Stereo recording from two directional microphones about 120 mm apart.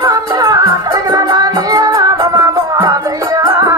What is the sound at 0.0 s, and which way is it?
Music, 30° right (ahead or behind).